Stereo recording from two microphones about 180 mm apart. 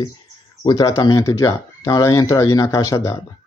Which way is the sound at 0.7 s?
20° left (ahead or behind).